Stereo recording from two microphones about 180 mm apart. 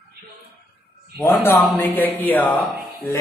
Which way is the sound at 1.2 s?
10° left (ahead or behind).